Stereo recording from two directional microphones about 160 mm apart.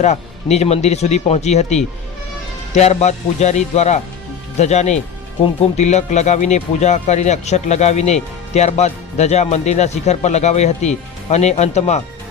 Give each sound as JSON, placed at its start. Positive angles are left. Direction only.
{"t": 0.0, "sound": "speech", "side_deg": 45}